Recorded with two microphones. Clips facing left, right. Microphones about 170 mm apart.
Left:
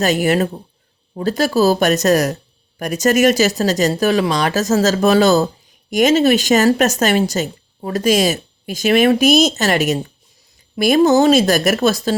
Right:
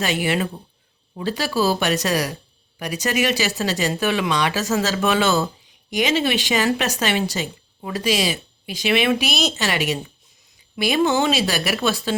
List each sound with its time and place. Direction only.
0.0 s speech: 40° left (ahead or behind)